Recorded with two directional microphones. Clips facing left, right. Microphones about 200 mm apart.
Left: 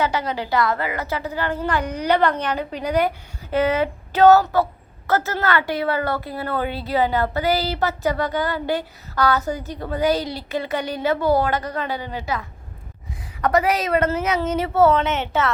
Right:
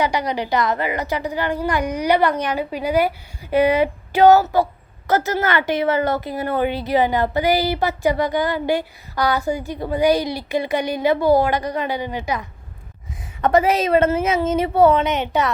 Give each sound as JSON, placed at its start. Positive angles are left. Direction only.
{"t": 0.0, "sound": "a woman's voice", "side_deg": -15}